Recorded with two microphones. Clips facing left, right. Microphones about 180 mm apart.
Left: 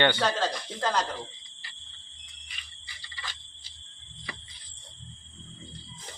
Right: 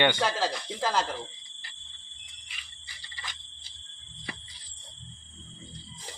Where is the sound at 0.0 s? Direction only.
10° right (ahead or behind).